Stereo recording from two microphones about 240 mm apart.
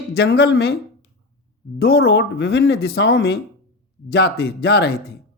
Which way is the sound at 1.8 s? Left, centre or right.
Left.